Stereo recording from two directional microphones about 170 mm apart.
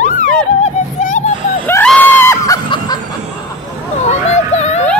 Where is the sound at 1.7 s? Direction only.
10° left (ahead or behind).